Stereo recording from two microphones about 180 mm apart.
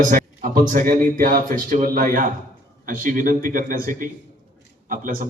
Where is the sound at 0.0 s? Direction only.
50° right (ahead or behind).